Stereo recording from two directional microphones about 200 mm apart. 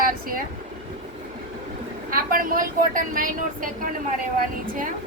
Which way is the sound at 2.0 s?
45° right (ahead or behind).